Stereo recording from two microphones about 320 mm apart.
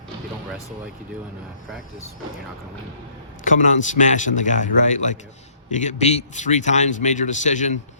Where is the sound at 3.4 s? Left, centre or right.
Left.